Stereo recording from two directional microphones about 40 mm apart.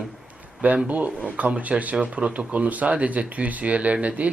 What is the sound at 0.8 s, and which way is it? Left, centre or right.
Speech, right.